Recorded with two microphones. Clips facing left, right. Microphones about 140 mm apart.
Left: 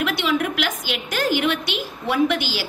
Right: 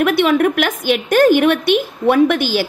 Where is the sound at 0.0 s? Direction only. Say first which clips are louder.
Right 9 dB; 55° right (ahead or behind).